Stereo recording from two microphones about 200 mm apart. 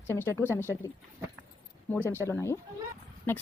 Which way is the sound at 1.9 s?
10° left (ahead or behind).